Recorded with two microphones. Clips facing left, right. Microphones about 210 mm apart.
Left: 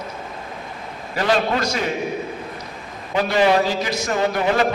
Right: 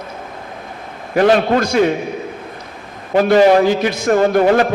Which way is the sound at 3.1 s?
45° right (ahead or behind).